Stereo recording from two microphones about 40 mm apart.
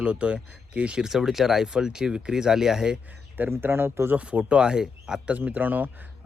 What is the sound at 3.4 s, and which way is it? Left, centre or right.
Speech, right.